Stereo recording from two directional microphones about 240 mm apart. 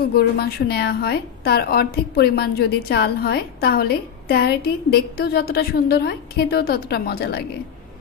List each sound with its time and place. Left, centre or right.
0.1 s a woman's voice: left